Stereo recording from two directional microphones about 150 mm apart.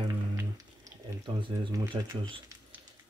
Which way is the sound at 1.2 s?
30° right (ahead or behind).